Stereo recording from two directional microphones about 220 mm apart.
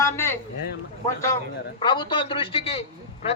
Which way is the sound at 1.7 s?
20° left (ahead or behind).